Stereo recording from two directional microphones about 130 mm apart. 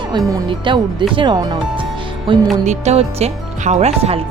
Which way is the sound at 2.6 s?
60° right (ahead or behind).